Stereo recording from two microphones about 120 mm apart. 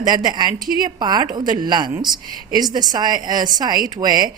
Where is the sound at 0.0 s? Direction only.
35° right (ahead or behind).